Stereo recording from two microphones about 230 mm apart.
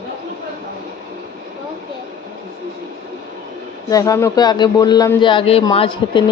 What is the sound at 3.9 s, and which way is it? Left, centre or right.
Speech, centre.